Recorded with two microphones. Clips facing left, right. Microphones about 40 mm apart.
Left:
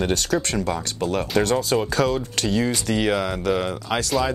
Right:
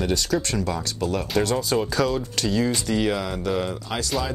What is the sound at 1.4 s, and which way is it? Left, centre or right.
Speech, left.